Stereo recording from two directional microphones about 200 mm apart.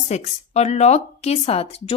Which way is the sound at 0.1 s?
35° left (ahead or behind).